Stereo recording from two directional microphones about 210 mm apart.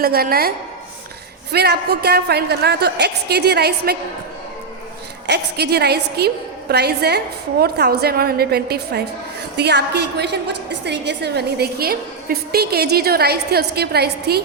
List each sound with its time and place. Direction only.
0.0 s a woman's voice: 45° right (ahead or behind)
1.5 s a woman's voice: 50° right (ahead or behind)
5.2 s a woman's voice: 50° right (ahead or behind)